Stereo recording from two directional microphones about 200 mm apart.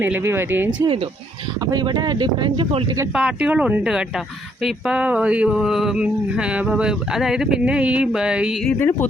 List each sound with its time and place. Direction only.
0.0 s speech: 10° right (ahead or behind)
3.2 s speech: 5° right (ahead or behind)
8.8 s speech: 10° left (ahead or behind)